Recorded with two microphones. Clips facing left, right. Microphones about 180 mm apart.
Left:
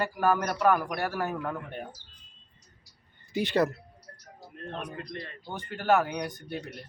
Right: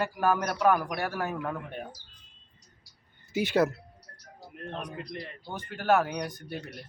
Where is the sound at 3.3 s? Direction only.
5° right (ahead or behind).